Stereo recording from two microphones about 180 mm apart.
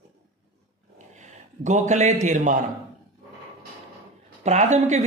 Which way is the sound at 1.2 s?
40° right (ahead or behind).